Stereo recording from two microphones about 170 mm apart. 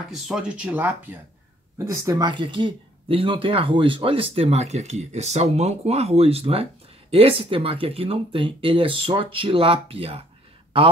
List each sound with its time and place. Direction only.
0.1 s speech: 5° right (ahead or behind); by 10.2 s 35° right (ahead or behind)